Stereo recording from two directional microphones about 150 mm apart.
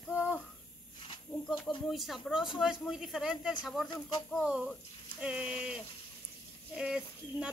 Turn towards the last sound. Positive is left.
turn(degrees=-5)  # may be behind; listen again after turning